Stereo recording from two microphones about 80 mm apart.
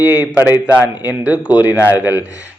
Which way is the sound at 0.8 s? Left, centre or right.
Centre.